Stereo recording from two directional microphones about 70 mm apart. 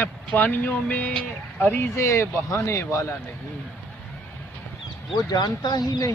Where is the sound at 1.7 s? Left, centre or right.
Left.